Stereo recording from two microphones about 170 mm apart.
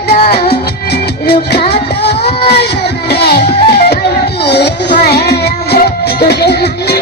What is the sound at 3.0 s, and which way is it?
Music, 70° left (ahead or behind).